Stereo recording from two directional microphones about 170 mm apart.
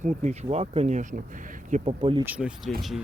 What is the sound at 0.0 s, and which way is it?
Speech, 40° right (ahead or behind).